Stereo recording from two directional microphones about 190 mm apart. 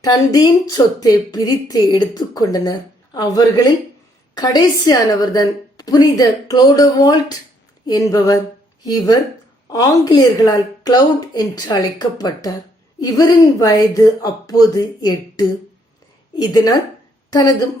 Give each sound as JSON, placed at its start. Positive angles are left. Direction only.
{"t": 0.0, "sound": "a woman's voice", "side_deg": 20}
{"t": 7.9, "sound": "a sound", "side_deg": 20}
{"t": 8.8, "sound": "a woman's voice", "side_deg": 20}